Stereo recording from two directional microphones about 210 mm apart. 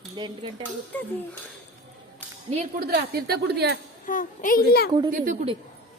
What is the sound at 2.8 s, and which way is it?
Speech, 50° right (ahead or behind).